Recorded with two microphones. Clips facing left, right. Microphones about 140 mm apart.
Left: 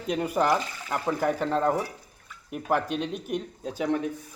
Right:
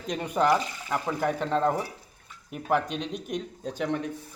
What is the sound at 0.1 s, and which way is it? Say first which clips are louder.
Speech: even; 5° left (ahead or behind).